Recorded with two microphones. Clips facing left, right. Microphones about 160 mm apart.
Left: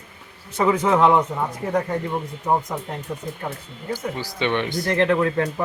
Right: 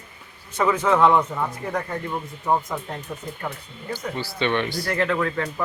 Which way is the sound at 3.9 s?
15° left (ahead or behind).